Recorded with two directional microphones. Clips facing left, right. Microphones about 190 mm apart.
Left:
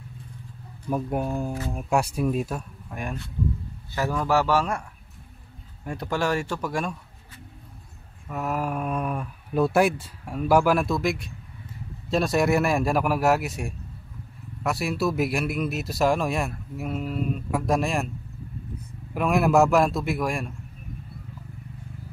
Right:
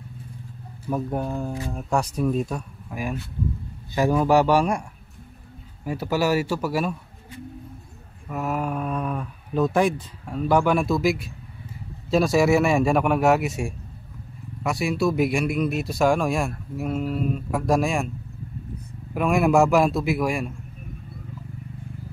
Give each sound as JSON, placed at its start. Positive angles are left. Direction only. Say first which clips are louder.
{"t": 0.9, "sound": "speech", "louder": "even", "side_deg": 10}
{"t": 3.9, "sound": "speech", "louder": "right 5 dB", "side_deg": -15}
{"t": 5.9, "sound": "speech", "louder": "right 3 dB", "side_deg": -5}
{"t": 8.3, "sound": "speech", "louder": "right 1 dB", "side_deg": 0}
{"t": 19.1, "sound": "speech", "louder": "right 1 dB", "side_deg": 0}